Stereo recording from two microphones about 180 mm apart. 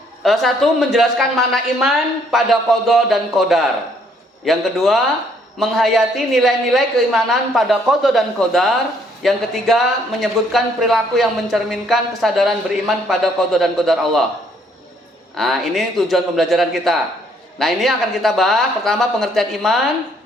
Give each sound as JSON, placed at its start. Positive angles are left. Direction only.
{"t": 0.2, "sound": "speech", "side_deg": 0}
{"t": 15.4, "sound": "speech", "side_deg": 0}